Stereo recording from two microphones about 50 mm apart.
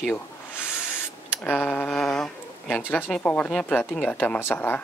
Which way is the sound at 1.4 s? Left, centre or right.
Left.